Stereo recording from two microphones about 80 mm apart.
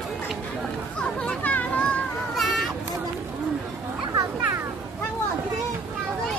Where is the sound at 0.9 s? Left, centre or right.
Centre.